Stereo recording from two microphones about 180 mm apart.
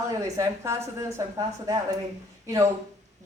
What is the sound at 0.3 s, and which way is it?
Speech, 15° right (ahead or behind).